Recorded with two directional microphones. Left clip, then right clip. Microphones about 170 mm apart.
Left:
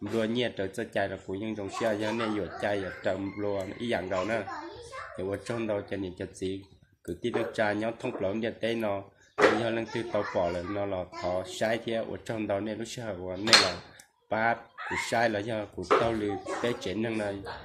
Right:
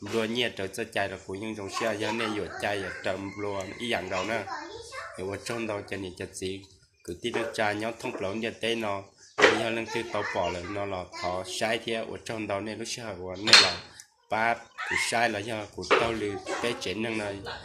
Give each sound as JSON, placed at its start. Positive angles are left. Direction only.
{"t": 0.2, "sound": "speech", "side_deg": 60}